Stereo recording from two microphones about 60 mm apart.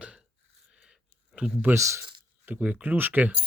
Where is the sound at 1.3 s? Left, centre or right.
Centre.